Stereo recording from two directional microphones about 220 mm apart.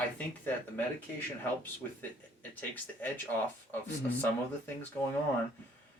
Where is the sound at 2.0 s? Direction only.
10° left (ahead or behind).